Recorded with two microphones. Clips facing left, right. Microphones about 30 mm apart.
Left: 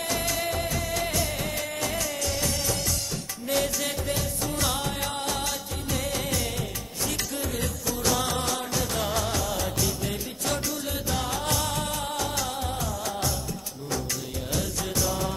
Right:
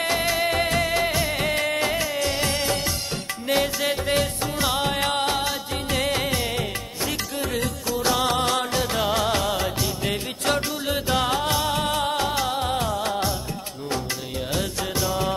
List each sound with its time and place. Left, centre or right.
0.0 s music: right
4.1 s music: right
4.6 s music: right
4.8 s music: right
8.0 s music: right
8.3 s music: right
11.4 s music: right
14.5 s music of bollywood: right